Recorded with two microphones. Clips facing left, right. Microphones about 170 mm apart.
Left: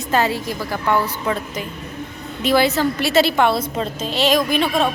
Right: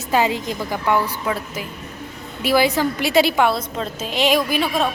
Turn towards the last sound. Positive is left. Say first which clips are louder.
# left 2 dB
turn(degrees=-5)  # may be behind; listen again after turning